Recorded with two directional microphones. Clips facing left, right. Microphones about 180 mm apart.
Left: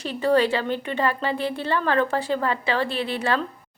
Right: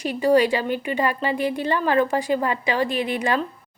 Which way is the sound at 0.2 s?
15° right (ahead or behind).